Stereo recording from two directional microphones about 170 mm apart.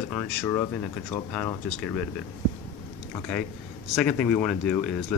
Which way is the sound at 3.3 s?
5° left (ahead or behind).